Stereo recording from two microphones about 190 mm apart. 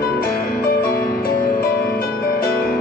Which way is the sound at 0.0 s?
50° left (ahead or behind).